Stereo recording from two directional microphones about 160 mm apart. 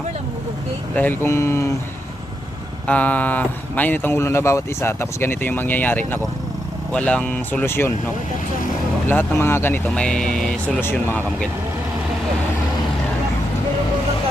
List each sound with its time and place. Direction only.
0.9 s speech: 10° left (ahead or behind)
2.8 s speech: 10° left (ahead or behind)
9.0 s speech: 15° left (ahead or behind)